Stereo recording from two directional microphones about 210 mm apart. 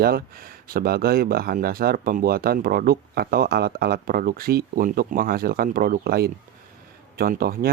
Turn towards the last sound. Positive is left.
turn(degrees=-45)  # may be behind; listen again after turning